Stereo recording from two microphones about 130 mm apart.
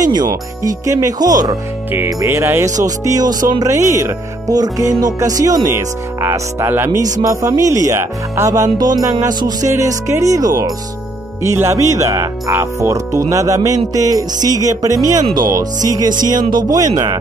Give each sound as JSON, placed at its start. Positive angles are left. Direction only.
{"t": 0.1, "sound": "speech", "side_deg": -30}
{"t": 1.9, "sound": "speech", "side_deg": -15}